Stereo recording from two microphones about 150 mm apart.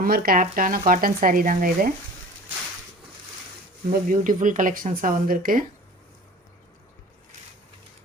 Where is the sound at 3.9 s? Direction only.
65° right (ahead or behind).